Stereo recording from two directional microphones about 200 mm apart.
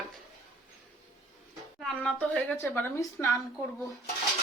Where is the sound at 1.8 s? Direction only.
5° left (ahead or behind).